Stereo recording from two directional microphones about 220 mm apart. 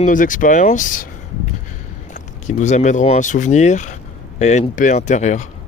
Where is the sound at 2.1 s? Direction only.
35° left (ahead or behind).